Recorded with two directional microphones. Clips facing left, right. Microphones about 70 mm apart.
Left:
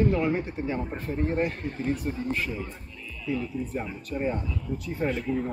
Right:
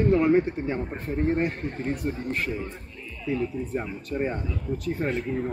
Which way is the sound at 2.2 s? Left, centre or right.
Right.